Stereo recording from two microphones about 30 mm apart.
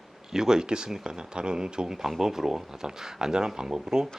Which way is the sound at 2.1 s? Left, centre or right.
Centre.